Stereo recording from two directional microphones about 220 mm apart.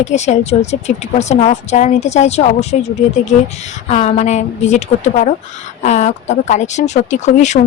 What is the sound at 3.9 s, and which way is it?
Speech, 30° left (ahead or behind).